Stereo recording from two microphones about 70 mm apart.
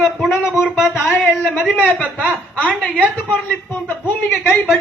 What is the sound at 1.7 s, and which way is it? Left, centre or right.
Speech, centre.